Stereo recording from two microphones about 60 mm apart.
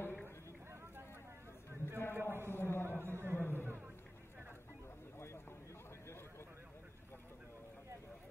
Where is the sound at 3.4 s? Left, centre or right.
Left.